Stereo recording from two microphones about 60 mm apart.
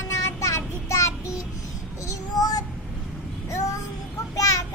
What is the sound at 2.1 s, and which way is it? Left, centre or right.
Child singing, left.